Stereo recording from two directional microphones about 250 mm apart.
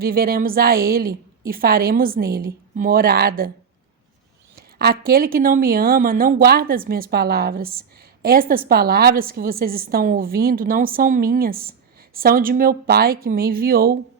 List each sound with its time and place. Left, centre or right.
0.0 s a woman's voice: right
4.5 s a woman's voice: right